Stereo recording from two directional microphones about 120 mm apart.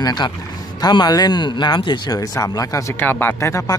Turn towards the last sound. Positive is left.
turn(degrees=25)  # may be behind; listen again after turning